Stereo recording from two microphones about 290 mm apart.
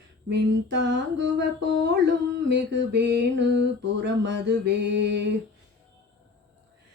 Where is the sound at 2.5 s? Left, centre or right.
Right.